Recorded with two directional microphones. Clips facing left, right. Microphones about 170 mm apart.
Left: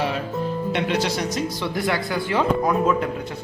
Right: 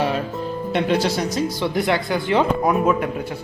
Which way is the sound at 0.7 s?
35° right (ahead or behind).